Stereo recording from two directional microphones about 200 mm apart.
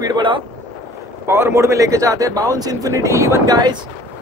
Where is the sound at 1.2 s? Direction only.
10° right (ahead or behind).